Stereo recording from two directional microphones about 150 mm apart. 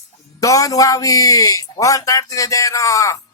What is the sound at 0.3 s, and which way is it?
A man's voice, 20° left (ahead or behind).